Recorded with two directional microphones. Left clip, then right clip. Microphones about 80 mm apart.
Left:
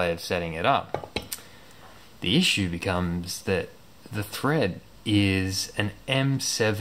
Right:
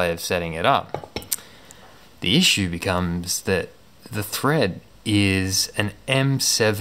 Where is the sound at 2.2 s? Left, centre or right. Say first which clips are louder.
Right 5 dB; right.